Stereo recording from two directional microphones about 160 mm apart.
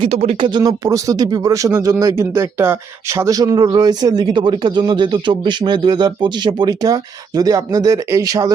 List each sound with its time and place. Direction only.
0.0 s speech: 40° right (ahead or behind)
0.4 s speech: 25° right (ahead or behind)